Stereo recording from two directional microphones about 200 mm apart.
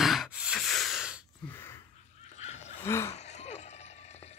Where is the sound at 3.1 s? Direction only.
35° left (ahead or behind).